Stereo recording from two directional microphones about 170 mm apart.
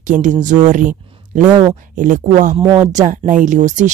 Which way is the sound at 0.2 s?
50° right (ahead or behind).